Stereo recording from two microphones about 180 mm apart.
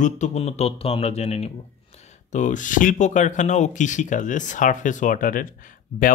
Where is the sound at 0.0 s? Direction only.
40° left (ahead or behind).